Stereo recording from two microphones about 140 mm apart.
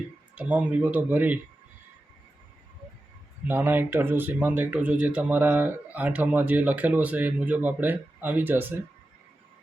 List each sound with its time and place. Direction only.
0.3 s speech: 10° right (ahead or behind)
3.4 s speech: 15° right (ahead or behind)